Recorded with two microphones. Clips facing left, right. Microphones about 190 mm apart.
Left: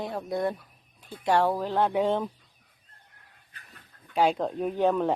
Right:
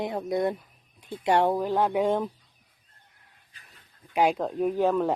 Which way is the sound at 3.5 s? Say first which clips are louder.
Left 4 dB; 65° left (ahead or behind).